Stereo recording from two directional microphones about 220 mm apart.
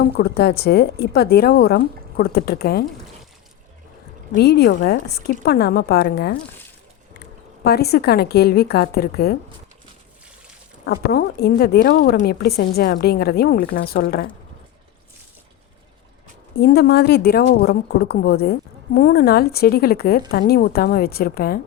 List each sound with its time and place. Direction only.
0.2 s a woman's voice: 50° left (ahead or behind)
4.4 s a woman's voice: 45° left (ahead or behind)
7.6 s a woman's voice: 45° left (ahead or behind)
10.8 s a woman's voice: 45° left (ahead or behind)
16.6 s a woman's voice: 45° left (ahead or behind)